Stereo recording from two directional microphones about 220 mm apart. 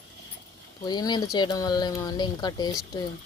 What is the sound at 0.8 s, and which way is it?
Speech, 20° left (ahead or behind).